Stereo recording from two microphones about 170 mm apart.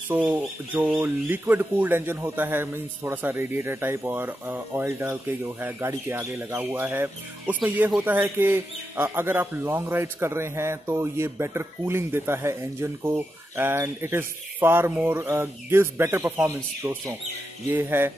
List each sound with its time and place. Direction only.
0.1 s speech: 10° right (ahead or behind)